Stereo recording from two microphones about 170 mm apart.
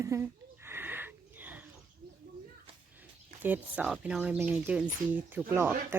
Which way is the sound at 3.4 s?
10° right (ahead or behind).